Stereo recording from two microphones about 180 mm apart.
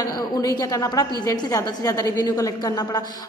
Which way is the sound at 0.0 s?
20° left (ahead or behind).